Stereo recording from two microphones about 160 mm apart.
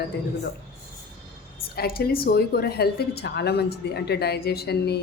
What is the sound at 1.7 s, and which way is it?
A woman's voice, 75° left (ahead or behind).